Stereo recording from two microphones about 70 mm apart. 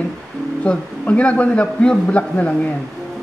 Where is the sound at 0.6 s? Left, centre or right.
Centre.